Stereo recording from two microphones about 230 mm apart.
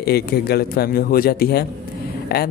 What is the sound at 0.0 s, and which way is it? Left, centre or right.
A man's voice, left.